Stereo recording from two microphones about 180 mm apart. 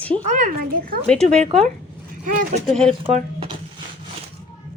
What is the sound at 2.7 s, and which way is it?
Speech, 5° left (ahead or behind).